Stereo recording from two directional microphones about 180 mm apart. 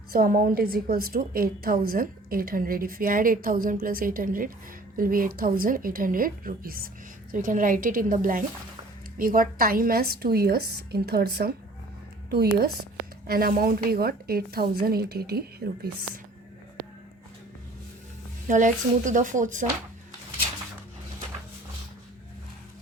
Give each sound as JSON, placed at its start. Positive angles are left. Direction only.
{"t": 0.1, "sound": "a woman's voice", "side_deg": -50}
{"t": 18.4, "sound": "a woman's voice", "side_deg": -45}